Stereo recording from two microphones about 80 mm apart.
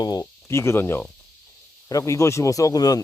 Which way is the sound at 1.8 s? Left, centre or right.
Left.